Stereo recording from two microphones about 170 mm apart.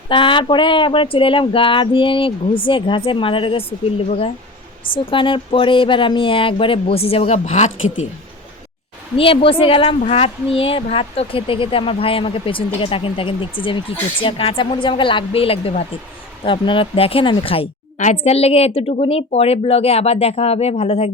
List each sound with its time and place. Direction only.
0.1 s a woman's voice: 30° left (ahead or behind)
9.1 s a woman's voice: 30° left (ahead or behind)